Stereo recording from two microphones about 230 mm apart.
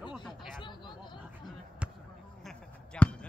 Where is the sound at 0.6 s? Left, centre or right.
Centre.